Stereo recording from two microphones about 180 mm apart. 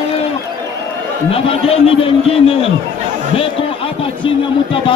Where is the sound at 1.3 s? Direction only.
30° left (ahead or behind).